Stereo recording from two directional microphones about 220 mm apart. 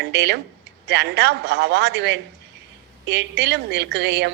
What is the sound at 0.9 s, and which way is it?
A woman's voice, 50° right (ahead or behind).